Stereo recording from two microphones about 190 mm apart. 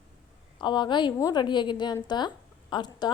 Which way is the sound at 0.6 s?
25° left (ahead or behind).